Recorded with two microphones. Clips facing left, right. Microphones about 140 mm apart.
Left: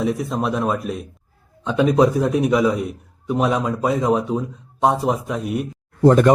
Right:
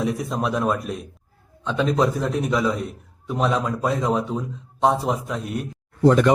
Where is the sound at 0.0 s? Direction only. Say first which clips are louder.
Left 3 dB; centre (ahead or behind).